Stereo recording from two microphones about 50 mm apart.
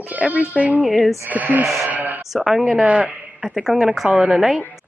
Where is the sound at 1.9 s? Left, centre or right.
Right.